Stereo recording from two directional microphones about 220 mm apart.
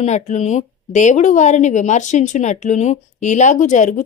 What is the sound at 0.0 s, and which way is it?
Speech, 30° left (ahead or behind).